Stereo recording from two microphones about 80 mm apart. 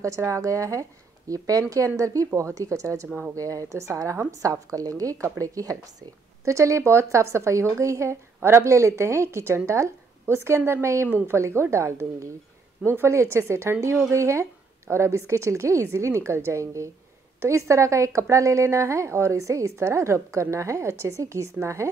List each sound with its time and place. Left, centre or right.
0.0 s a woman's voice: right
3.1 s speech: right
3.3 s a woman's voice: right